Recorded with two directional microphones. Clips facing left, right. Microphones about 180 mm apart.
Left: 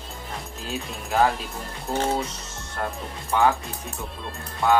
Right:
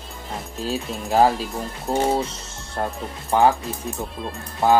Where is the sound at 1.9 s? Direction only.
35° right (ahead or behind).